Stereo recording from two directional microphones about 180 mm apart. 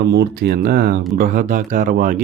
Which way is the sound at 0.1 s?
65° right (ahead or behind).